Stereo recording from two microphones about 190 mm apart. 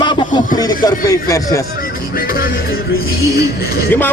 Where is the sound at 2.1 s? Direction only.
50° left (ahead or behind).